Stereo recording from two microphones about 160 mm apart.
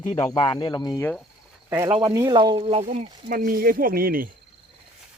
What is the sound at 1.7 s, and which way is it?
Speech, 20° right (ahead or behind).